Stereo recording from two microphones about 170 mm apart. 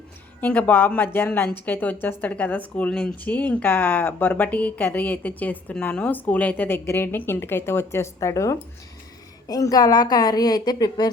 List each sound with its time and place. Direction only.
0.4 s a woman's voice: 10° left (ahead or behind)